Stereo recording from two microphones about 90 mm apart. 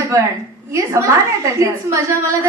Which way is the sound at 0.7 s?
30° right (ahead or behind).